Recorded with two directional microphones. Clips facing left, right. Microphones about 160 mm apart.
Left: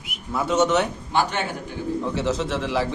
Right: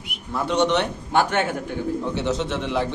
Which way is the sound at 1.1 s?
50° right (ahead or behind).